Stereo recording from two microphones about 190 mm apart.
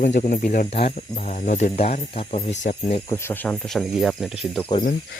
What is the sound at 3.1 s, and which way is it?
Speech, 10° left (ahead or behind).